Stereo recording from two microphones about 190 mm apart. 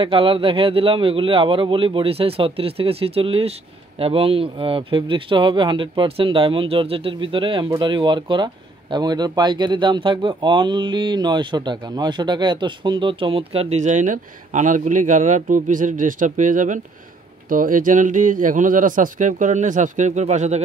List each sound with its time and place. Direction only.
0.0 s a man's voice: 30° right (ahead or behind)